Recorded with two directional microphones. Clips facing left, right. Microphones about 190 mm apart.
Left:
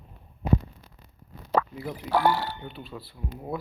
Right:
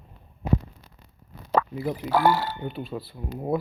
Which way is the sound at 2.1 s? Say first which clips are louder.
Right 2 dB; 90° right.